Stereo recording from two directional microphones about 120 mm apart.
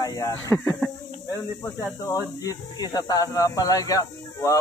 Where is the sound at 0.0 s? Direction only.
25° left (ahead or behind).